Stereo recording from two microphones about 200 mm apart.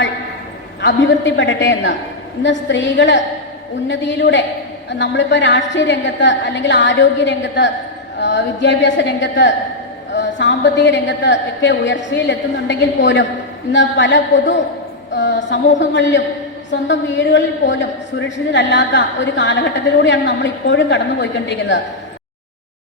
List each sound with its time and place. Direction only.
0.8 s a woman's voice: 65° left (ahead or behind)